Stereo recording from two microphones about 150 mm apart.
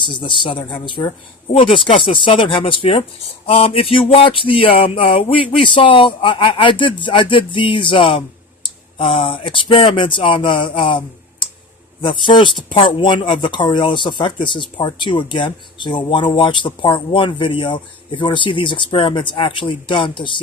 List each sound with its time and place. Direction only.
0.0 s speech: 30° left (ahead or behind)